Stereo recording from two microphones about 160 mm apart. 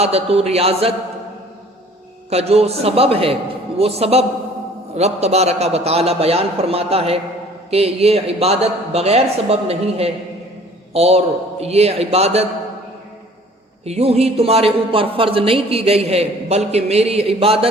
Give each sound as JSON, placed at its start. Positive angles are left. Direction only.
{"t": 0.0, "sound": "speech", "side_deg": -40}
{"t": 2.3, "sound": "speech", "side_deg": -40}
{"t": 13.8, "sound": "speech", "side_deg": -40}